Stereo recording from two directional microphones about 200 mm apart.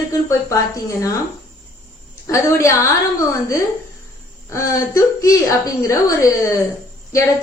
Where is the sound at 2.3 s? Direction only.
15° left (ahead or behind).